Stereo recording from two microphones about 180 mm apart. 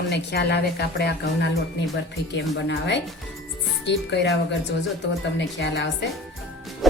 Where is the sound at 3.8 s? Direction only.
75° left (ahead or behind).